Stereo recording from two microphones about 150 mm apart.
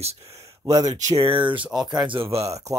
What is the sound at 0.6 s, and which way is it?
Speech, 25° right (ahead or behind).